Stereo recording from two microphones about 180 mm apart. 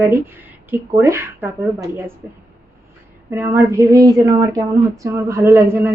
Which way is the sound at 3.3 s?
10° right (ahead or behind).